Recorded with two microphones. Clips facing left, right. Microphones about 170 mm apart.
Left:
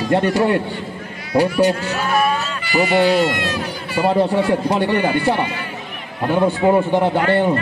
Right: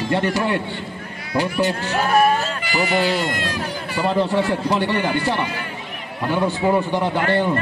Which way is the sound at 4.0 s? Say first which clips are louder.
Left 3 dB; 55° left (ahead or behind).